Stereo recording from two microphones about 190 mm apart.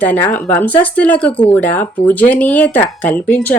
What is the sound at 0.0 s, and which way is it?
Speech, 10° left (ahead or behind).